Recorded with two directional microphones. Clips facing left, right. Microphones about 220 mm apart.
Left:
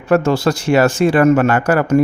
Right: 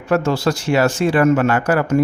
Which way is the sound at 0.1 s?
55° left (ahead or behind).